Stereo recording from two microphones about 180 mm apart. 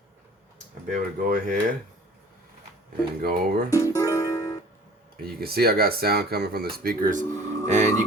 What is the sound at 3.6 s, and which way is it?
Music, 20° left (ahead or behind).